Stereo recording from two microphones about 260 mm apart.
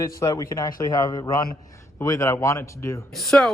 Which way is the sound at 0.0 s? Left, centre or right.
Centre.